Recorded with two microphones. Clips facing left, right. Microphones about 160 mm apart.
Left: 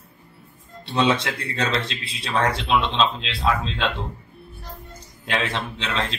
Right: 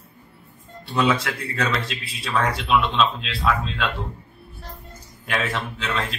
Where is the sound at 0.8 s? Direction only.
25° left (ahead or behind).